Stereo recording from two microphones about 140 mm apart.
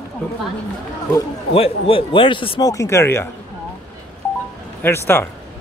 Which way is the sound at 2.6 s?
25° left (ahead or behind).